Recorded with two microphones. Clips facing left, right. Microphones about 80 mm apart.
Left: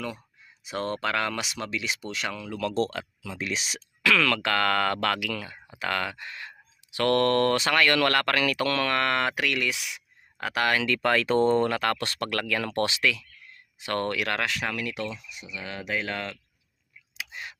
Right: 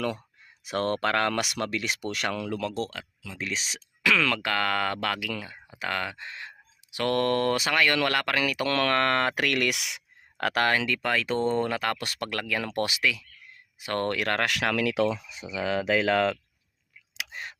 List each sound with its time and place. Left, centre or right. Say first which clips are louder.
0.6 s speech: right 3 dB; right
2.7 s speech: left 5 dB; centre
3.3 s speech: left 1 dB; centre
4.0 s speech: left 1 dB; centre
8.7 s speech: right 1 dB; right
9.6 s speech: right 2 dB; right
10.6 s speech: even; right
10.8 s speech: left 3 dB; centre
11.7 s speech: left 2 dB; centre
14.0 s speech: right 2 dB; right
14.4 s speech: right 4 dB; right